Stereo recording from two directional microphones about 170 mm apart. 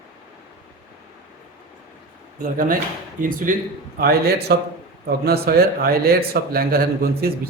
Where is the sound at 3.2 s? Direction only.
50° right (ahead or behind).